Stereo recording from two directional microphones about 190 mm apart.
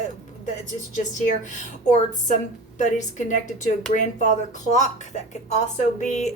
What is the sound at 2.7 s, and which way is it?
A woman's voice, 40° left (ahead or behind).